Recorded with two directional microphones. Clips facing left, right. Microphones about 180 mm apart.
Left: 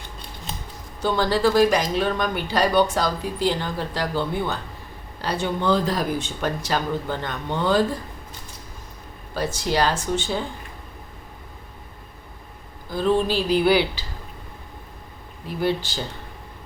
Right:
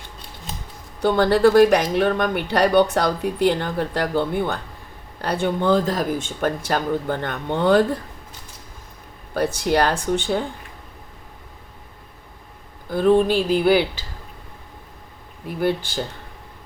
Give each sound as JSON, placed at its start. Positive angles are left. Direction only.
{"t": 1.0, "sound": "speech", "side_deg": -60}
{"t": 9.3, "sound": "speech", "side_deg": -60}
{"t": 12.9, "sound": "speech", "side_deg": -55}
{"t": 15.4, "sound": "speech", "side_deg": -55}